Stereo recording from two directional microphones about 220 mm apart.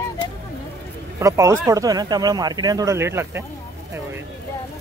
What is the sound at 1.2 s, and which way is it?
A man's voice, 15° right (ahead or behind).